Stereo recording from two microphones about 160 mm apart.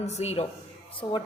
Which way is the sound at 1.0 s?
30° left (ahead or behind).